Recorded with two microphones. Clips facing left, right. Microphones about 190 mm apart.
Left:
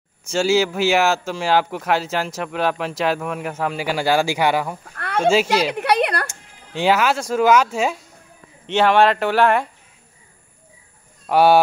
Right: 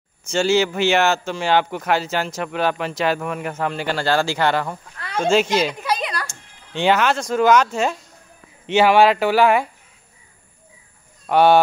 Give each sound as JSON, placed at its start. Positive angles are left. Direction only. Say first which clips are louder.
{"t": 0.3, "sound": "speech", "louder": "even", "side_deg": 5}
{"t": 4.8, "sound": "a sound", "louder": "left 3 dB", "side_deg": 60}
{"t": 5.2, "sound": "speech", "louder": "even", "side_deg": 5}
{"t": 5.7, "sound": "a sound", "louder": "left 5 dB", "side_deg": 65}
{"t": 6.7, "sound": "speech", "louder": "even", "side_deg": 5}
{"t": 8.6, "sound": "speech", "louder": "right 1 dB", "side_deg": -5}
{"t": 11.2, "sound": "speech", "louder": "even", "side_deg": 5}